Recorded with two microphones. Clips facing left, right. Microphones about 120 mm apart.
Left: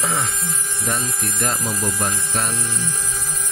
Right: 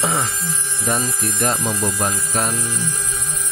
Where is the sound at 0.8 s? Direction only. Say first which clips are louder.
Right 4 dB; 20° right (ahead or behind).